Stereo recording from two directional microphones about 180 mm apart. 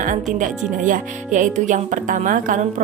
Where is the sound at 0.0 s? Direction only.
45° right (ahead or behind).